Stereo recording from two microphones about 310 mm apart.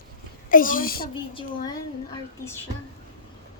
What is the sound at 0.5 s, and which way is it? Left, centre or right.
Speech, left.